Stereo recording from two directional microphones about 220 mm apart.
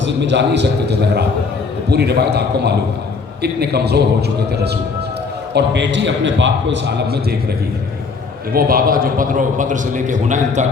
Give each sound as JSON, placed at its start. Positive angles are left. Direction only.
{"t": 0.0, "sound": "a man's voice", "side_deg": -55}
{"t": 8.5, "sound": "a man's voice", "side_deg": -40}